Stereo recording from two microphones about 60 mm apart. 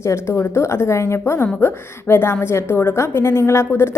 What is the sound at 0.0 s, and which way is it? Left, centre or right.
A woman's voice, left.